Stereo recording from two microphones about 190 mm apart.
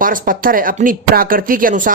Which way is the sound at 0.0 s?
45° right (ahead or behind).